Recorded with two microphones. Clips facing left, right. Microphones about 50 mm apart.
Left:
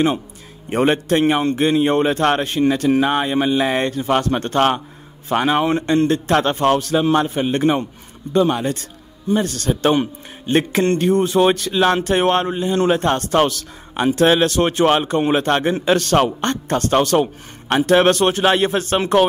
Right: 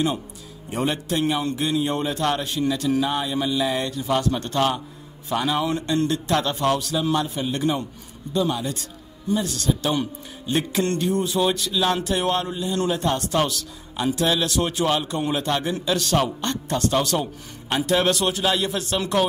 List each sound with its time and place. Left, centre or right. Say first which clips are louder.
0.7 s a man's voice: left 8 dB; left